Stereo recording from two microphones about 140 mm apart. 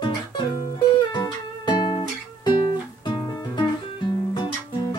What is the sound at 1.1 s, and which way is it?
Music, 30° left (ahead or behind).